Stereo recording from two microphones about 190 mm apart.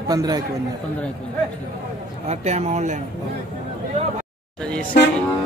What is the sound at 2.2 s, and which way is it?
Speech, 35° right (ahead or behind).